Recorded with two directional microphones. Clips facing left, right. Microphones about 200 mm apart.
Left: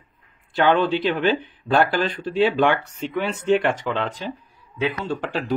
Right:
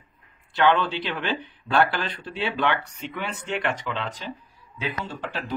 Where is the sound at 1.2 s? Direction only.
50° left (ahead or behind).